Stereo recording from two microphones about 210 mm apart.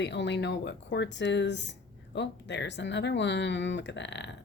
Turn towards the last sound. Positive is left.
turn(degrees=55)  # may be behind; listen again after turning